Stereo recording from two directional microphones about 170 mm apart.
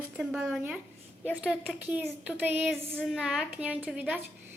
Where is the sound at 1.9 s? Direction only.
10° right (ahead or behind).